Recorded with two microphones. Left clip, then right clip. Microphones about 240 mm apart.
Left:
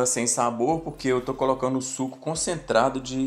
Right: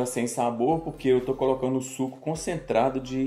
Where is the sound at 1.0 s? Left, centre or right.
Left.